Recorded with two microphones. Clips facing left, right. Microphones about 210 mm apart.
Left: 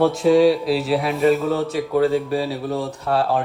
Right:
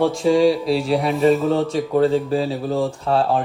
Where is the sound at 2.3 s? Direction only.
25° right (ahead or behind).